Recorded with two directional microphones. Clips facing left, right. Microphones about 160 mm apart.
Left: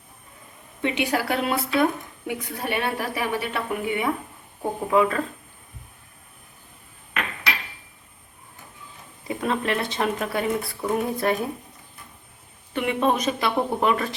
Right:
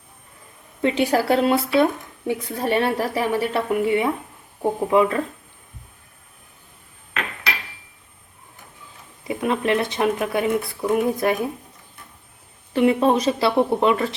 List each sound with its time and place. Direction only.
0.8 s speech: 35° right (ahead or behind)
3.8 s speech: 25° right (ahead or behind)
9.2 s speech: 20° right (ahead or behind)
10.6 s speech: centre (ahead or behind)
10.9 s speech: 15° right (ahead or behind)
12.7 s speech: 35° right (ahead or behind)